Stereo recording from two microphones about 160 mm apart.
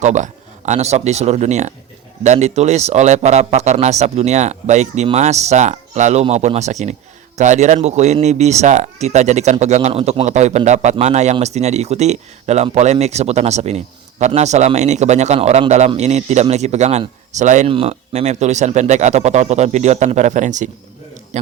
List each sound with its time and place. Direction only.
0.0 s speech: 50° right (ahead or behind)